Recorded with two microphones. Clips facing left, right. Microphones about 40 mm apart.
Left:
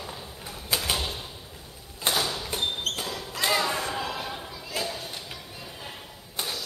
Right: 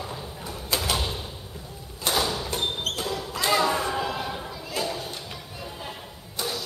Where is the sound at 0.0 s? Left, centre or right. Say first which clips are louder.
Right 4 dB; centre.